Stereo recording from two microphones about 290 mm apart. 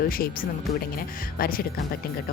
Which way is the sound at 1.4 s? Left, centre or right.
Left.